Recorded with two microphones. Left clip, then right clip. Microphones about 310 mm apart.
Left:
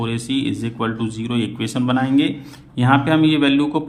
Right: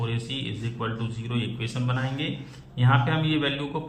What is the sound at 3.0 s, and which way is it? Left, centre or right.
Speech, left.